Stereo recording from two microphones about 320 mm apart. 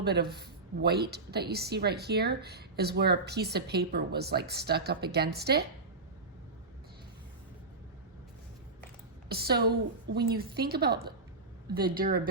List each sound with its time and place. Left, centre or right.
0.0 s a woman's voice: right
9.3 s a woman's voice: right